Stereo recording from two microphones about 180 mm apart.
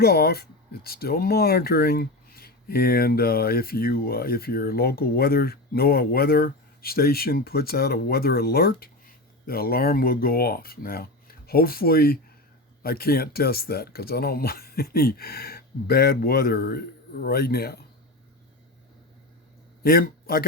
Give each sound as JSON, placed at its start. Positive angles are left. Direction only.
{"t": 0.0, "sound": "speech", "side_deg": 60}
{"t": 19.8, "sound": "a man's voice", "side_deg": 55}